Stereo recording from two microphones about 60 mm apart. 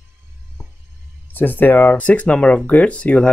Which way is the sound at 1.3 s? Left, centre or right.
Left.